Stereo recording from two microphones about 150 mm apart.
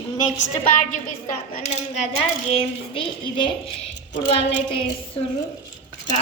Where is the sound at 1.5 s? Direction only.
50° left (ahead or behind).